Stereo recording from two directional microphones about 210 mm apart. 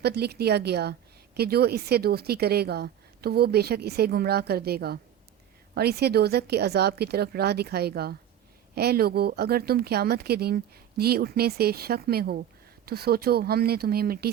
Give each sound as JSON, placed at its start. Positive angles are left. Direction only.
{"t": 0.0, "sound": "speech", "side_deg": -50}